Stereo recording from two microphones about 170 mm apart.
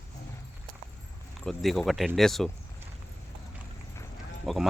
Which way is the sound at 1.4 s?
Centre (ahead or behind).